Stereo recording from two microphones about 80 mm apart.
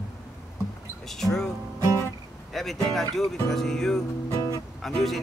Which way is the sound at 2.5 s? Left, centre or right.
Centre.